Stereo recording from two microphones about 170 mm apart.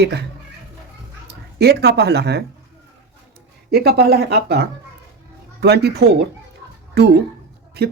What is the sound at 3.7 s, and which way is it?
Speech, 70° right (ahead or behind).